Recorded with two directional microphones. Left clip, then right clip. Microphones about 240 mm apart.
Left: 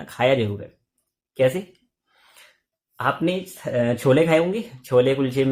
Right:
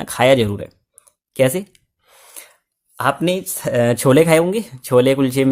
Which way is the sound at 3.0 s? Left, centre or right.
Right.